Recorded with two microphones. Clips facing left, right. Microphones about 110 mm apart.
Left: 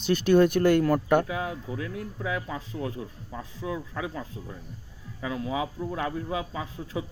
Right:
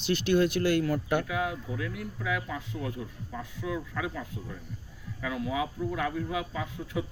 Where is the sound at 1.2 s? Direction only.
30° left (ahead or behind).